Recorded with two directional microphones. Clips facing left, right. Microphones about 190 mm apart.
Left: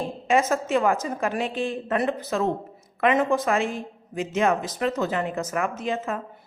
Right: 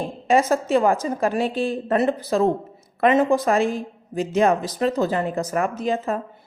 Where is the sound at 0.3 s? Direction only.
35° right (ahead or behind).